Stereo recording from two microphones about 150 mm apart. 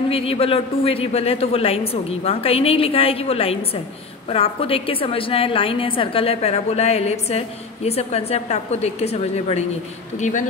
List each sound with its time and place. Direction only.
0.1 s a woman's voice: 40° left (ahead or behind)